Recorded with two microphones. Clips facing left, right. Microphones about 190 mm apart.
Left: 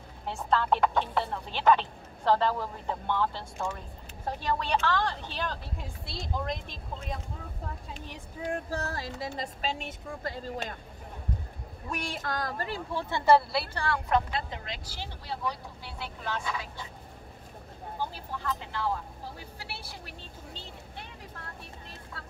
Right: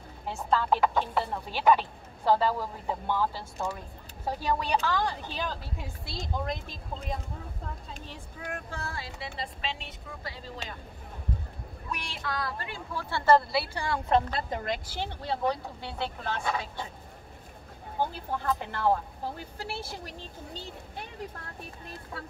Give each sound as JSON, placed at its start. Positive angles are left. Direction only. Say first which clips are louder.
{"t": 0.3, "sound": "speech", "louder": "even", "side_deg": 0}
{"t": 8.5, "sound": "speech", "louder": "left 5 dB", "side_deg": 35}
{"t": 11.9, "sound": "speech", "louder": "left 2 dB", "side_deg": 45}
{"t": 12.9, "sound": "speech", "louder": "even", "side_deg": 15}
{"t": 13.9, "sound": "a woman's voice", "louder": "right 3 dB", "side_deg": -25}
{"t": 14.3, "sound": "speech", "louder": "right 4 dB", "side_deg": -50}
{"t": 17.9, "sound": "speech", "louder": "right 5 dB", "side_deg": -55}